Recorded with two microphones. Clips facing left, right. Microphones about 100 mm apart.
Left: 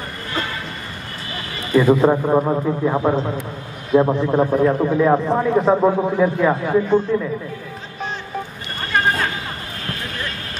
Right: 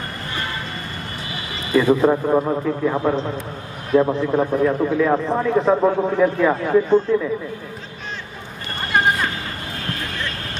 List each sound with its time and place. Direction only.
1.8 s a man's voice: 10° left (ahead or behind)
4.9 s a man's voice: 20° left (ahead or behind)
5.4 s a man's voice: 5° left (ahead or behind)